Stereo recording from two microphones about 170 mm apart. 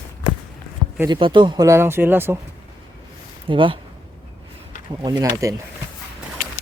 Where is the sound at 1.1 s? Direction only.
25° right (ahead or behind).